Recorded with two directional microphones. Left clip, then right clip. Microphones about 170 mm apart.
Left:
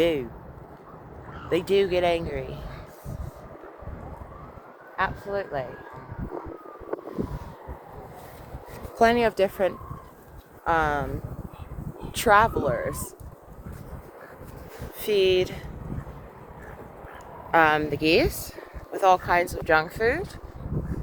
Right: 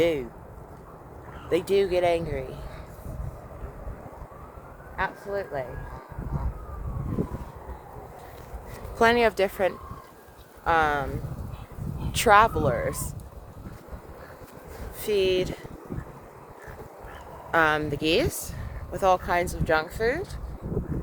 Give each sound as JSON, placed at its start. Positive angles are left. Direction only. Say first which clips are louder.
{"t": 0.0, "sound": "speech", "louder": "left 1 dB", "side_deg": -10}
{"t": 1.5, "sound": "speech", "louder": "left 1 dB", "side_deg": -25}
{"t": 4.9, "sound": "speech", "louder": "left 2 dB", "side_deg": -15}
{"t": 9.0, "sound": "speech", "louder": "even", "side_deg": -15}
{"t": 12.1, "sound": "speech", "louder": "right 1 dB", "side_deg": -15}
{"t": 15.0, "sound": "speech", "louder": "left 2 dB", "side_deg": -20}
{"t": 17.5, "sound": "speech", "louder": "left 3 dB", "side_deg": -20}